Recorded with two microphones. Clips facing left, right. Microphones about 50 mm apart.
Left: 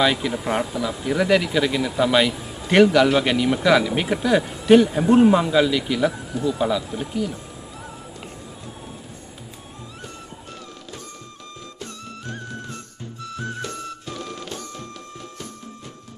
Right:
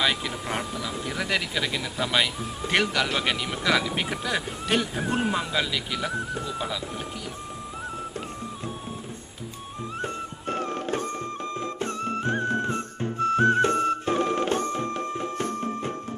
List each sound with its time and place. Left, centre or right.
0.0 s speech: centre
6.4 s speech: right
7.0 s speech: centre
10.0 s music: right